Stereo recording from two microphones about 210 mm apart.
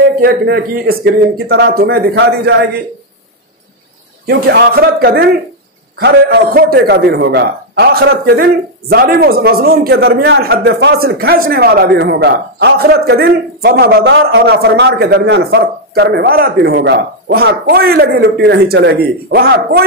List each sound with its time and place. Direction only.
0.2 s a man's voice: 45° right (ahead or behind)
4.3 s a man's voice: 50° right (ahead or behind)